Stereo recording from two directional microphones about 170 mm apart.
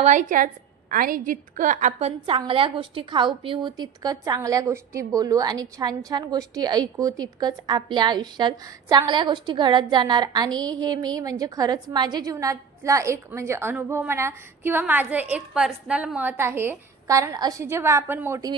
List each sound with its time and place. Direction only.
0.0 s a woman's voice: 50° right (ahead or behind); by 18.5 s 15° right (ahead or behind)